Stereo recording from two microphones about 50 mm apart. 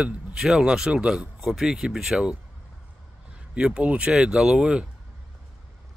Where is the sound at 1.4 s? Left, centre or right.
Centre.